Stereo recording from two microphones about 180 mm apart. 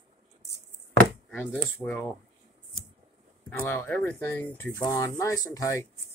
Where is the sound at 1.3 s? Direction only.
10° left (ahead or behind).